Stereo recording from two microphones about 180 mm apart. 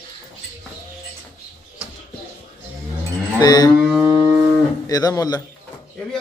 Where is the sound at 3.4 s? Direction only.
20° left (ahead or behind).